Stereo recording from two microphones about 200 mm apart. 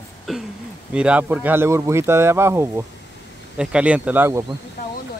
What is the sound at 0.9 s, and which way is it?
Speech, 5° right (ahead or behind).